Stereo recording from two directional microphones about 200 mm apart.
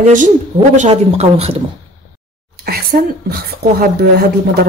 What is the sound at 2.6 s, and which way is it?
Speech, 50° right (ahead or behind).